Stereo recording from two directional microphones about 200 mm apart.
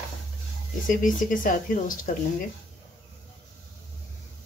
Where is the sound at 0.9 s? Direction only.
40° left (ahead or behind).